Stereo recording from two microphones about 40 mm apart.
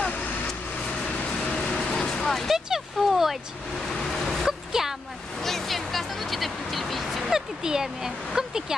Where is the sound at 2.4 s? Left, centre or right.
Centre.